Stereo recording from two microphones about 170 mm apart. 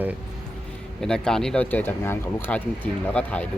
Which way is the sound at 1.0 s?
5° left (ahead or behind).